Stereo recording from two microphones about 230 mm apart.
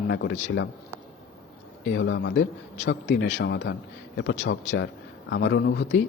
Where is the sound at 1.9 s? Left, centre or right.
Left.